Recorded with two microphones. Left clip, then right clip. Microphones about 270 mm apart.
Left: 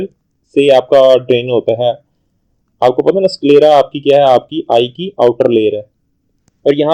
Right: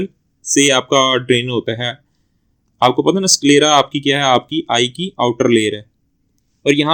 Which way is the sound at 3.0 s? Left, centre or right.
Right.